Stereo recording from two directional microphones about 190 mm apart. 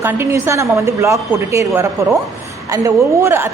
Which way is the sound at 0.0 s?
15° right (ahead or behind).